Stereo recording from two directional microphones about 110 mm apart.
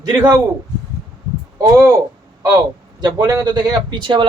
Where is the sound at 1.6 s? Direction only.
25° right (ahead or behind).